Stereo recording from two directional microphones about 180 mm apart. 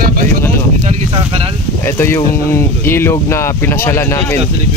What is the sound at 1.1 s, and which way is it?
Speech, 30° right (ahead or behind).